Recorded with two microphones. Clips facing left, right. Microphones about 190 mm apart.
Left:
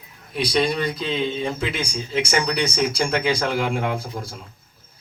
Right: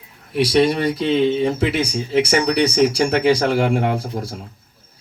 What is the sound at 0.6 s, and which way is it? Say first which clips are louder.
Speech: right 6 dB; 70° right (ahead or behind).